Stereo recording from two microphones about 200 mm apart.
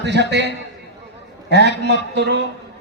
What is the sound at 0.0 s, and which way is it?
A man's voice, 60° right (ahead or behind).